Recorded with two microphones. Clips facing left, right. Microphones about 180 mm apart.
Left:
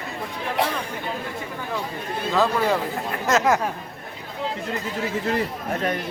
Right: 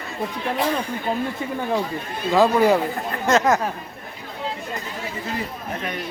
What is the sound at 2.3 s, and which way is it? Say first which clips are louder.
Speech: right 5 dB; 15° right (ahead or behind).